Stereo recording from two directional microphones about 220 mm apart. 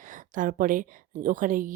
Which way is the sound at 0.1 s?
35° right (ahead or behind).